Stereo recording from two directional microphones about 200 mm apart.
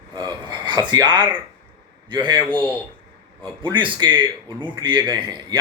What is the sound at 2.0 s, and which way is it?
Speech, 20° right (ahead or behind).